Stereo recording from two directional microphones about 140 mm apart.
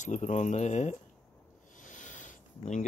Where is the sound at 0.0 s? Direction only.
55° left (ahead or behind).